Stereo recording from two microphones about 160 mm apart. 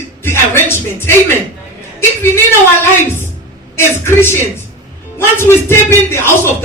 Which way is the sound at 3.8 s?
15° left (ahead or behind).